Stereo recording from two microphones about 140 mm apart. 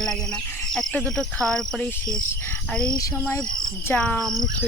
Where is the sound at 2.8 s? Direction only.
30° left (ahead or behind).